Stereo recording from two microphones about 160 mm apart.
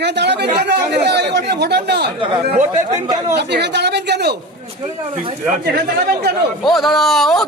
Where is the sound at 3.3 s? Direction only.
90° right.